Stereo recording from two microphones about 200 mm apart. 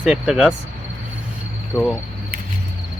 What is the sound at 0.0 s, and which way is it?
Speech, 5° right (ahead or behind).